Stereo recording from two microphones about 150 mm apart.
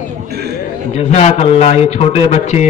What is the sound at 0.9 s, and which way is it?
A man's voice, 45° left (ahead or behind).